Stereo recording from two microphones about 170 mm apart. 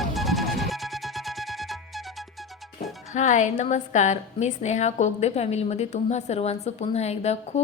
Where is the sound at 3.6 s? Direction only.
45° left (ahead or behind).